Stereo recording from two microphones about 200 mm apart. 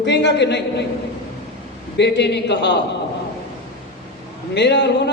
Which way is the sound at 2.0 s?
60° left (ahead or behind).